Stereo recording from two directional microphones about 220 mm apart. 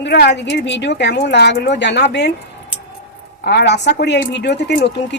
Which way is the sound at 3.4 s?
50° left (ahead or behind).